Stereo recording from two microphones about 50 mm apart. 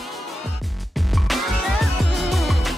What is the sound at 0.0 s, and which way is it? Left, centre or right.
Music, centre.